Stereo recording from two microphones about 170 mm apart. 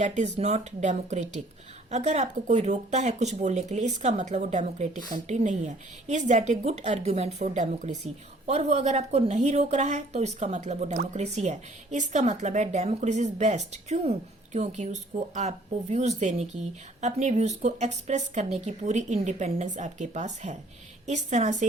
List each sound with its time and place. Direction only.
0.0 s a woman's voice: 40° right (ahead or behind)